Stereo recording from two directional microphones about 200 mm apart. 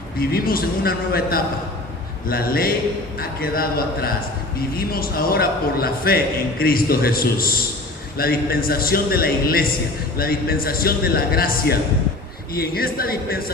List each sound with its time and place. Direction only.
0.2 s a man's voice: 50° left (ahead or behind)